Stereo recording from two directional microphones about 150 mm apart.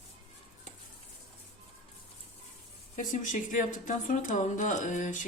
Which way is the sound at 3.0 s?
60° left (ahead or behind).